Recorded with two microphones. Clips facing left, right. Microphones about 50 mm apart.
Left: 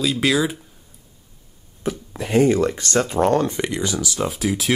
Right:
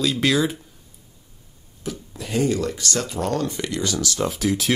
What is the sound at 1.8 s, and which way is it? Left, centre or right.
Speech, left.